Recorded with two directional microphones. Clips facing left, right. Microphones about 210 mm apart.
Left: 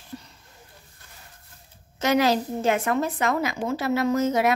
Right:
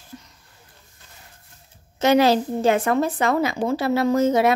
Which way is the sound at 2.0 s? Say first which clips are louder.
Right 4 dB; 30° right (ahead or behind).